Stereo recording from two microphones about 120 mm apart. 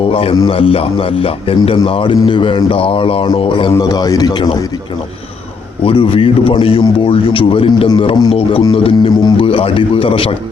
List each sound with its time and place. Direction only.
0.1 s speech: 50° left (ahead or behind)
3.7 s a man's voice: 30° left (ahead or behind)
5.8 s a man's voice: 50° left (ahead or behind)
8.3 s speech: 55° left (ahead or behind)